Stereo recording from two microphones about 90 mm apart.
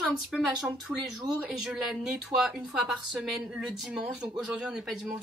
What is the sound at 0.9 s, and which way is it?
Speech, 5° right (ahead or behind).